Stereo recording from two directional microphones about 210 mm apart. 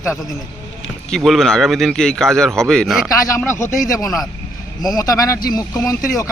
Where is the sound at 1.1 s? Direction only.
Centre (ahead or behind).